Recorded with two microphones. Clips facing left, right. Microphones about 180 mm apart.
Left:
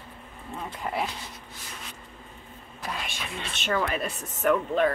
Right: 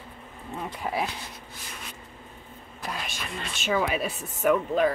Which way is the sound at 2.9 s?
Centre (ahead or behind).